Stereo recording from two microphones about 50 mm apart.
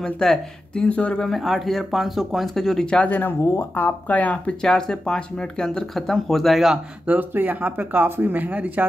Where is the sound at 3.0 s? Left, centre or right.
Left.